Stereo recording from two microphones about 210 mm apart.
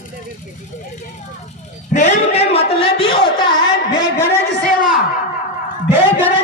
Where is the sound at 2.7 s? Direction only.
25° left (ahead or behind).